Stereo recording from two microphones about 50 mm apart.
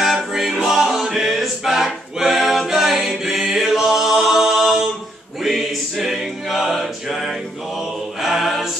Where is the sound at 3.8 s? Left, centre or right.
Centre.